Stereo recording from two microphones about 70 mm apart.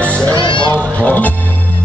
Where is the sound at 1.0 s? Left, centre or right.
Left.